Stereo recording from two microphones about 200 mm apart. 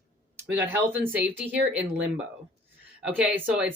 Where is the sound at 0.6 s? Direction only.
10° right (ahead or behind).